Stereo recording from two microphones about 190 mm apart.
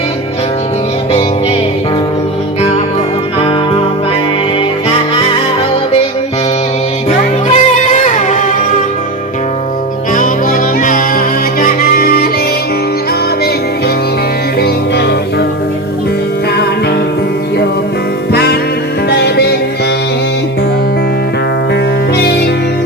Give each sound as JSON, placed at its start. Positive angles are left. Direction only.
{"t": 7.1, "sound": "music", "side_deg": 35}
{"t": 10.8, "sound": "music", "side_deg": 45}
{"t": 14.6, "sound": "music", "side_deg": 60}
{"t": 18.3, "sound": "music", "side_deg": 60}